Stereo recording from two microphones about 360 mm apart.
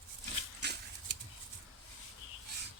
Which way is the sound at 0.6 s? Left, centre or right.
Right.